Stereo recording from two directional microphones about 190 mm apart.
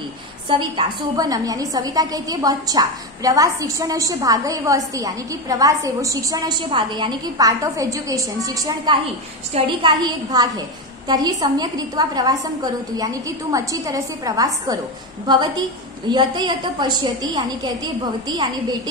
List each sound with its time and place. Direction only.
0.5 s a woman's voice: 25° right (ahead or behind)